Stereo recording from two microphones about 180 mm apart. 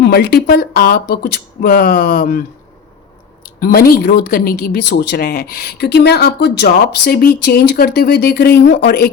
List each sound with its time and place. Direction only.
0.0 s speech: 65° left (ahead or behind)
3.6 s speech: 55° left (ahead or behind)